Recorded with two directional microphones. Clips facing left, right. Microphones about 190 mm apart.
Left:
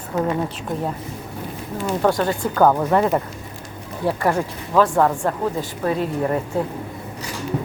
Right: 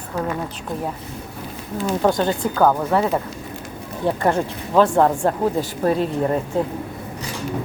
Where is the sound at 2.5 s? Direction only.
5° left (ahead or behind).